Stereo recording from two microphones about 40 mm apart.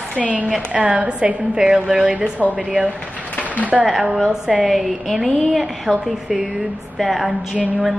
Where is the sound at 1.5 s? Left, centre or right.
Centre.